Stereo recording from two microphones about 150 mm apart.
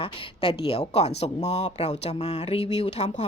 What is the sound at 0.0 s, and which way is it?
A woman's voice, 35° left (ahead or behind).